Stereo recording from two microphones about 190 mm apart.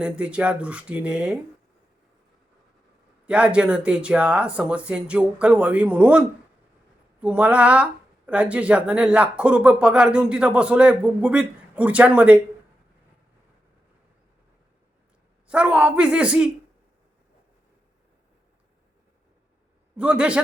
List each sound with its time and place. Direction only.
0.0 s speech: 5° right (ahead or behind)
3.2 s speech: 5° right (ahead or behind)
15.4 s speech: 5° right (ahead or behind)
20.0 s speech: 5° right (ahead or behind)